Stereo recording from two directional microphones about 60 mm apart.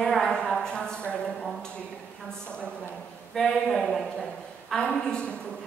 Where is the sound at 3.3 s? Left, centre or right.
Centre.